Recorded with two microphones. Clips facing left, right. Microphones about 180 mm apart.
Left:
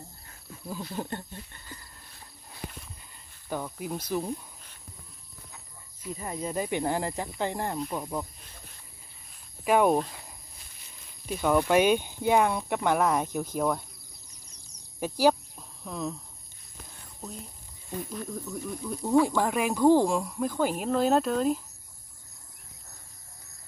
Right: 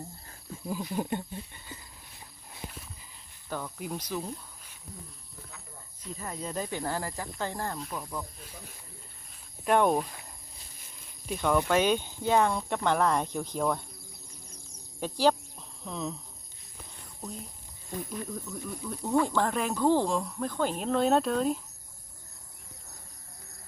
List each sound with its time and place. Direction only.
0.9 s speech: 15° right (ahead or behind)
2.5 s a sound: centre (ahead or behind)
3.8 s speech: centre (ahead or behind)
4.1 s speech: 15° left (ahead or behind)
6.0 s speech: 10° left (ahead or behind)
7.8 s speech: centre (ahead or behind)
9.6 s speech: 5° left (ahead or behind)
11.3 s speech: 10° left (ahead or behind)
15.0 s speech: 10° left (ahead or behind)
18.3 s speech: 5° left (ahead or behind)